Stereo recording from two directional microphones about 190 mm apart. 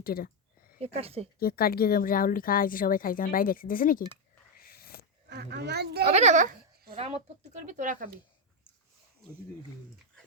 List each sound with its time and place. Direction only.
0.0 s speech: 50° left (ahead or behind)
0.8 s speech: 35° right (ahead or behind)
1.4 s speech: 50° left (ahead or behind)
4.5 s a sound: 50° left (ahead or behind)
5.3 s speech: 60° right (ahead or behind)
6.1 s speech: 35° right (ahead or behind)